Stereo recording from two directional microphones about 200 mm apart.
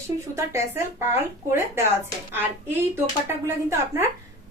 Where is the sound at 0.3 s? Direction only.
15° right (ahead or behind).